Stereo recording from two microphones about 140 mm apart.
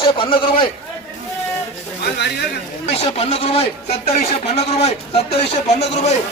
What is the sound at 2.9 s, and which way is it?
Speech, 45° left (ahead or behind).